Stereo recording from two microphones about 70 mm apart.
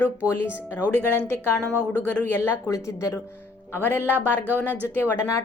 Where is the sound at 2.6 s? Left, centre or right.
Left.